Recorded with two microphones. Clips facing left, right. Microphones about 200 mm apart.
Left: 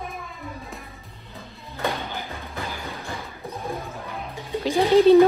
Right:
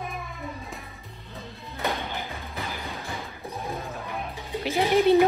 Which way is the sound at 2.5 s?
15° right (ahead or behind).